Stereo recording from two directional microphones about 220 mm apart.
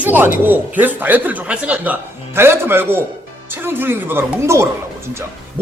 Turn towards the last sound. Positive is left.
turn(degrees=-10)  # may be behind; listen again after turning